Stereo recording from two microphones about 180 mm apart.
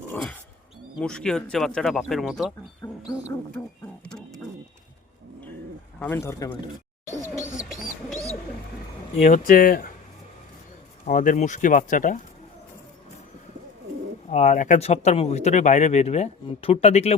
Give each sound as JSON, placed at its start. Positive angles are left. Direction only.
{"t": 0.1, "sound": "speech", "side_deg": 5}
{"t": 2.8, "sound": "music", "side_deg": 15}
{"t": 4.0, "sound": "a sound", "side_deg": 5}
{"t": 6.0, "sound": "speech", "side_deg": 15}
{"t": 9.1, "sound": "speech", "side_deg": 45}
{"t": 11.0, "sound": "speech", "side_deg": 45}
{"t": 14.3, "sound": "speech", "side_deg": 40}